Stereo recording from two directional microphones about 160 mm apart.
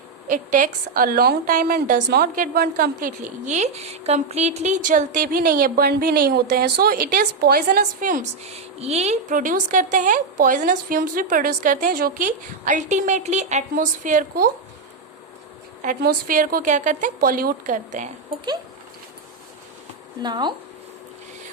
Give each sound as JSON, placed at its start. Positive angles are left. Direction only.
{"t": 0.3, "sound": "a woman's voice", "side_deg": -55}
{"t": 15.8, "sound": "a woman's voice", "side_deg": -55}
{"t": 20.2, "sound": "speech", "side_deg": -25}